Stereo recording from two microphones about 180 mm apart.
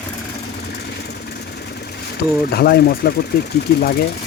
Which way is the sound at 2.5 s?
60° left (ahead or behind).